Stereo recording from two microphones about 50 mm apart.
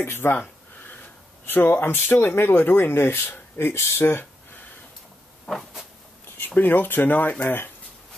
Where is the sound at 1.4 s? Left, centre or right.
Left.